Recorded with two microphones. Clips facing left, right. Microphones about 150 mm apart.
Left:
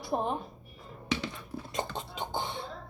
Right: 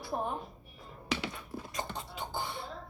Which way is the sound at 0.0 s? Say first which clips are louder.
Left 4 dB; 20° left (ahead or behind).